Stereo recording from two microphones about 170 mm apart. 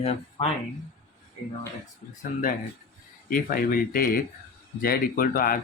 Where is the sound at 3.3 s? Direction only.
60° left (ahead or behind).